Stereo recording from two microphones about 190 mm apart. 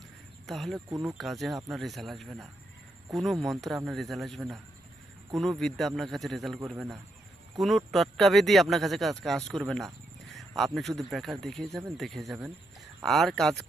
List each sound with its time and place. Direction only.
0.4 s speech: centre (ahead or behind)
0.9 s speech: 15° right (ahead or behind)
1.2 s speech: centre (ahead or behind)